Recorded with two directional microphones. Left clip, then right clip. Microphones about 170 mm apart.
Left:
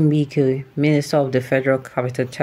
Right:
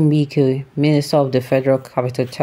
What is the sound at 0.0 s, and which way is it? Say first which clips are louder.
Speech: right 2 dB; 25° right (ahead or behind).